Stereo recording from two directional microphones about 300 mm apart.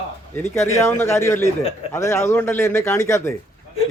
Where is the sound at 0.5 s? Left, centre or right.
Centre.